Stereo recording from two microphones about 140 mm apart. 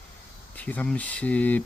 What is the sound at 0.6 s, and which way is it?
Speech, 10° left (ahead or behind).